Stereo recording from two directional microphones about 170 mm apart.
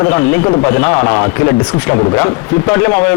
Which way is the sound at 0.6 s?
10° left (ahead or behind).